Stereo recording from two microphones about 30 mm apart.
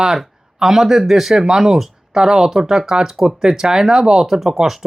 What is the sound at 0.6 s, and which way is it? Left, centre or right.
Speech, centre.